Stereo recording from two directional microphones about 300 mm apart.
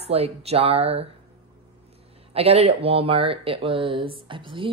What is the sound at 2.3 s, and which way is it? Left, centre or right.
Speech, centre.